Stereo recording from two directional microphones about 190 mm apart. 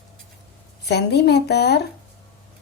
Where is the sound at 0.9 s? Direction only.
60° left (ahead or behind).